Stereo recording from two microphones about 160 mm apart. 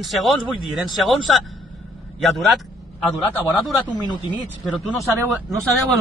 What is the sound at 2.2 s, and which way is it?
Vehicle, centre (ahead or behind).